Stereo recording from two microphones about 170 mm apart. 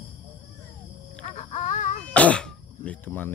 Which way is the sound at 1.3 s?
45° left (ahead or behind).